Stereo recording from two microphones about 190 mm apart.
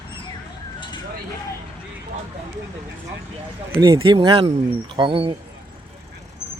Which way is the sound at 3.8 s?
25° right (ahead or behind).